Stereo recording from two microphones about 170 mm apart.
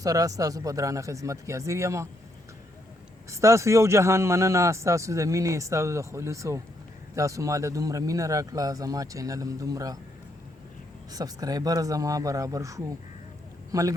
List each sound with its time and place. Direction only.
0.0 s speech: 20° right (ahead or behind)
3.2 s a man's voice: 15° right (ahead or behind)
11.1 s speech: 20° right (ahead or behind)